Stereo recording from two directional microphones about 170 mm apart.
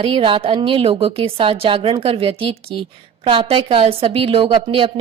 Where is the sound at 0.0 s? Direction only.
30° right (ahead or behind).